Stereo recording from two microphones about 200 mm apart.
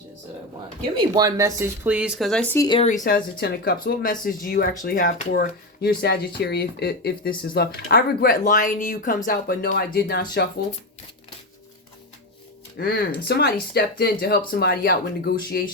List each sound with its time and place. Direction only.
0.9 s speech: 20° right (ahead or behind); by 2.6 s 5° left (ahead or behind)
2.6 s speech: 25° left (ahead or behind)
3.1 s speech: 50° left (ahead or behind)
5.3 s speech: 50° left (ahead or behind)
12.7 s speech: 50° left (ahead or behind)